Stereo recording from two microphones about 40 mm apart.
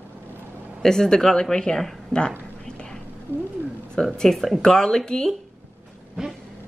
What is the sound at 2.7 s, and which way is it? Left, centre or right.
Whispering, centre.